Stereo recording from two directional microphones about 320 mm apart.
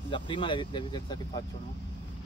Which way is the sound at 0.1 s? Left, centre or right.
Centre.